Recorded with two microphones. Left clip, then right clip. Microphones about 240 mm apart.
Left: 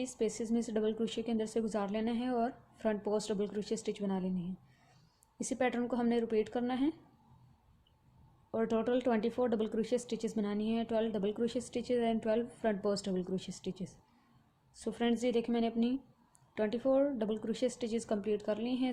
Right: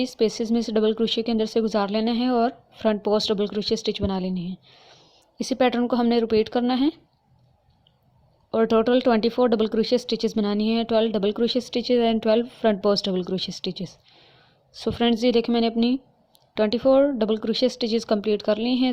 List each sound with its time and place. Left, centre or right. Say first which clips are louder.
0.0 s speech: right 13 dB; right
5.4 s speech: right 12 dB; right
8.4 s speech: right 13 dB; right